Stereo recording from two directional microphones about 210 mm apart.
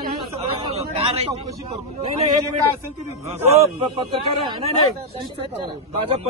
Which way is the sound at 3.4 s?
25° right (ahead or behind).